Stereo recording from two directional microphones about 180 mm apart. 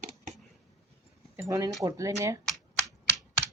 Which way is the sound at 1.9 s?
20° right (ahead or behind).